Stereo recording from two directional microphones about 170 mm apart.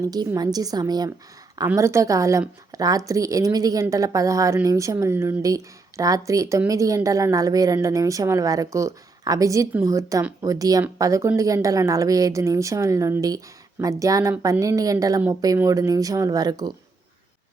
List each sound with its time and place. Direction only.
0.1 s a woman's voice: 20° right (ahead or behind)